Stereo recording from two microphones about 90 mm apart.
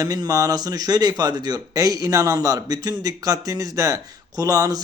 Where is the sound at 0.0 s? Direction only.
40° right (ahead or behind).